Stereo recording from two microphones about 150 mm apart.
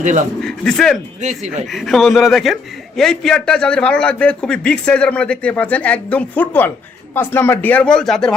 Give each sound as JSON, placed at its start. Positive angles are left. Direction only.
{"t": 0.0, "sound": "speech", "side_deg": -55}
{"t": 0.4, "sound": "a man's voice", "side_deg": 0}